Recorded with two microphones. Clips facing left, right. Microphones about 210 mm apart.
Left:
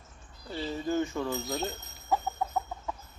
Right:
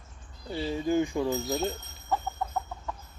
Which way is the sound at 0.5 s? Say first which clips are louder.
Right 3 dB; 15° right (ahead or behind).